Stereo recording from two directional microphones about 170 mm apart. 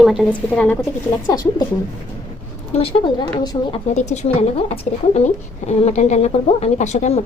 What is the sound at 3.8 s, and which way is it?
Speech, 40° left (ahead or behind).